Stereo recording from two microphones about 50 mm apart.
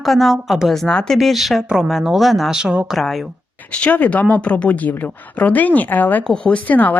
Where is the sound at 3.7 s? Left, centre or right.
Left.